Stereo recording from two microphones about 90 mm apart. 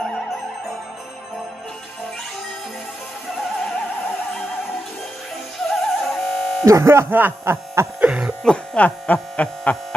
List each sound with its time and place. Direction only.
5.7 s music: centre (ahead or behind)
6.6 s speech: 35° right (ahead or behind)
8.0 s speech: 10° right (ahead or behind)
8.5 s speech: 15° left (ahead or behind)